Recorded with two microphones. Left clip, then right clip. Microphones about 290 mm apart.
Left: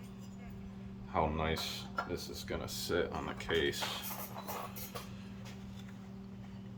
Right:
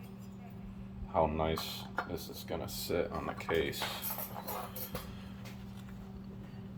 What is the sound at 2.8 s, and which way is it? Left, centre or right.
Speech, centre.